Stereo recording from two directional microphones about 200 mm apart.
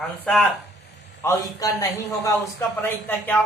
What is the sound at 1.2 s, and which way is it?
Speech, 15° left (ahead or behind).